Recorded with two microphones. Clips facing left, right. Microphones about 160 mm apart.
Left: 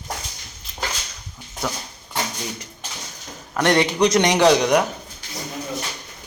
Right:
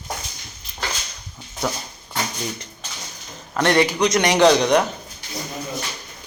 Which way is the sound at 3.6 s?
20° left (ahead or behind).